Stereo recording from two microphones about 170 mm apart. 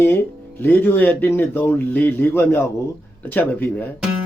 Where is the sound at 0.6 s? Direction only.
10° left (ahead or behind).